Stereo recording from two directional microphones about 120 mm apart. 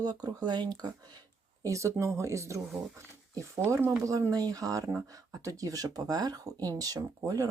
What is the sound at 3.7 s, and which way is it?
Speech, 25° right (ahead or behind).